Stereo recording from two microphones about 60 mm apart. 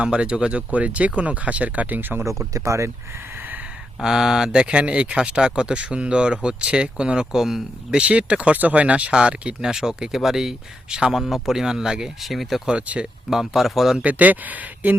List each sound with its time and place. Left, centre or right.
0.0 s speech: centre; by 2.2 s right
2.5 s speech: right
4.0 s speech: centre
7.9 s speech: centre
12.6 s speech: centre
13.3 s speech: centre
14.0 s speech: right